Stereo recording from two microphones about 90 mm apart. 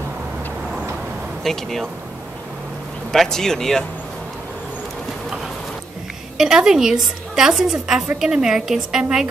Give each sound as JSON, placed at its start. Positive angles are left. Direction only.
{"t": 1.4, "sound": "speech", "side_deg": 5}
{"t": 3.1, "sound": "speech", "side_deg": 5}
{"t": 6.3, "sound": "a woman's voice", "side_deg": -5}